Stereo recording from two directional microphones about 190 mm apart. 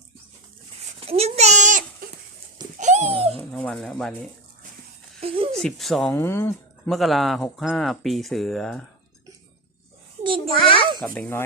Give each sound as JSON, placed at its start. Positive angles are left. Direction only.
{"t": 0.9, "sound": "a sound", "side_deg": -30}
{"t": 3.3, "sound": "dog", "side_deg": 5}
{"t": 5.2, "sound": "speech", "side_deg": -30}
{"t": 5.5, "sound": "speech", "side_deg": 0}
{"t": 10.2, "sound": "a child's voice", "side_deg": -25}
{"t": 10.5, "sound": "a child's voice", "side_deg": 25}
{"t": 10.8, "sound": "a child's voice", "side_deg": -25}
{"t": 11.0, "sound": "speech", "side_deg": 10}